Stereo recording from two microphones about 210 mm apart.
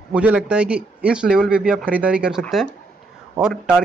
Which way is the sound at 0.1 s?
5° right (ahead or behind).